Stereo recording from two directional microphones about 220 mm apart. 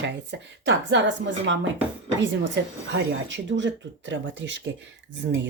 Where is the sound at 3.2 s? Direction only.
55° right (ahead or behind).